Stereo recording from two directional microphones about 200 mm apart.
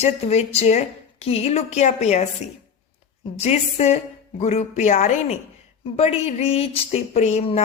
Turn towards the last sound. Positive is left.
turn(degrees=30)  # may be behind; listen again after turning